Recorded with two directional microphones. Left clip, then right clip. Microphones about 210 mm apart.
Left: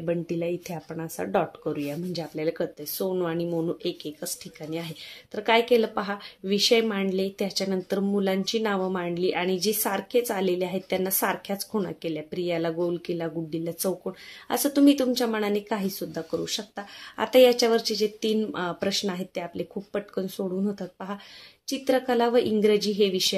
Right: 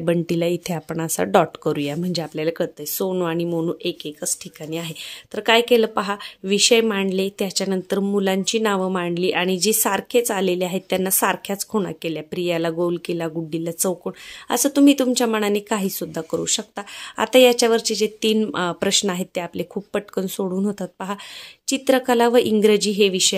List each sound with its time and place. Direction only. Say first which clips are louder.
0.0 s speech: right 7 dB; 45° right (ahead or behind)